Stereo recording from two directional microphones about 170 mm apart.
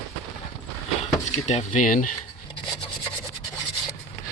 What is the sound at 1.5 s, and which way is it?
Speech, 45° left (ahead or behind).